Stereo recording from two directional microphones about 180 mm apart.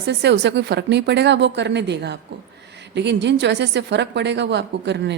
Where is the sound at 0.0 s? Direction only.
70° right (ahead or behind).